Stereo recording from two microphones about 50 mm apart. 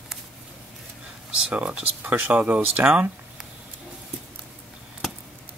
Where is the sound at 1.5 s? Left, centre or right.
Right.